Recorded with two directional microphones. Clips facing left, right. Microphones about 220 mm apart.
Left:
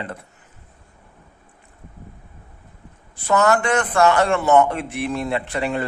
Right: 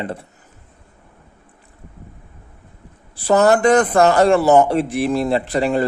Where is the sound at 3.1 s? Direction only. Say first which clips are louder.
Right 4 dB; 35° right (ahead or behind).